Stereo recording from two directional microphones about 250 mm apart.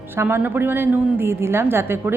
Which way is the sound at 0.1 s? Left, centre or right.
Centre.